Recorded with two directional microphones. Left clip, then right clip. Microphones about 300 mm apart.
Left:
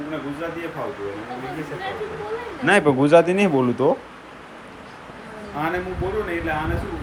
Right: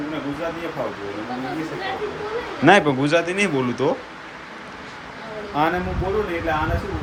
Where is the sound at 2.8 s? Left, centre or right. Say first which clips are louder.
Left 5 dB; centre.